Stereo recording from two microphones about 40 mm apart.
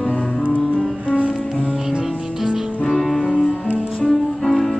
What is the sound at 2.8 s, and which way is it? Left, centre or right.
Music, centre.